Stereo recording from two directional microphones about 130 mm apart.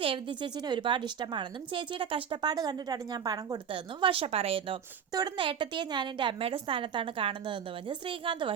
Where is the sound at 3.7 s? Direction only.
45° right (ahead or behind).